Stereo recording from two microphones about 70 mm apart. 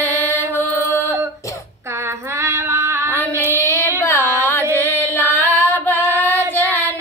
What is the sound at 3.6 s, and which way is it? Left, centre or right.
Carnatic music, left.